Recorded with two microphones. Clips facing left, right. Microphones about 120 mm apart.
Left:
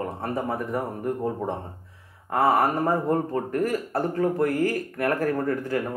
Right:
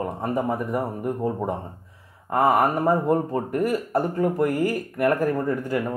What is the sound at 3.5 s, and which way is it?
Speech, 35° right (ahead or behind).